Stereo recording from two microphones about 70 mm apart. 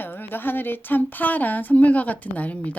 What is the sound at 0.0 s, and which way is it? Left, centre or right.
A woman's voice, left.